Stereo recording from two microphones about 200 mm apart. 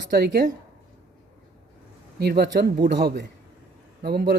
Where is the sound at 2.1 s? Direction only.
55° right (ahead or behind).